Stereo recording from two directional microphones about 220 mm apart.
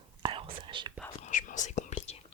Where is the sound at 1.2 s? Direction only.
35° left (ahead or behind).